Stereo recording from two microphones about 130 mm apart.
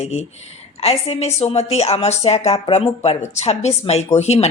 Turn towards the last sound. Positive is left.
turn(degrees=55)  # may be behind; listen again after turning